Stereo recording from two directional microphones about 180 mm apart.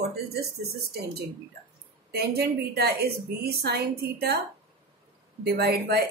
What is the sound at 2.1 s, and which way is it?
A woman's voice, 60° right (ahead or behind).